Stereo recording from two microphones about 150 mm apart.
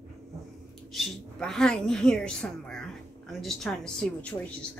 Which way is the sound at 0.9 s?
Centre (ahead or behind).